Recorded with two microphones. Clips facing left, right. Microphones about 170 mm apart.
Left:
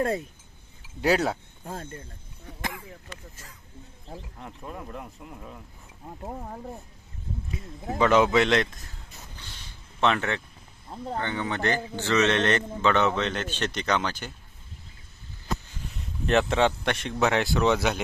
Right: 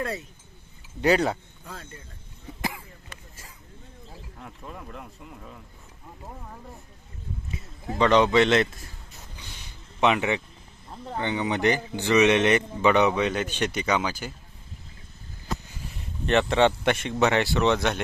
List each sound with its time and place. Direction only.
0.0 s speech: 50° left (ahead or behind)
1.0 s speech: centre (ahead or behind)
1.6 s speech: 50° left (ahead or behind)
2.6 s a sound: 5° right (ahead or behind)
4.4 s speech: 5° left (ahead or behind)
7.9 s speech: 5° left (ahead or behind)
9.4 s a sound: 10° right (ahead or behind)
11.2 s speech: 15° right (ahead or behind)
16.0 s speech: centre (ahead or behind)